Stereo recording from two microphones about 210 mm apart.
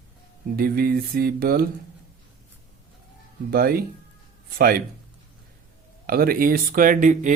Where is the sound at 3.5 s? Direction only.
45° right (ahead or behind).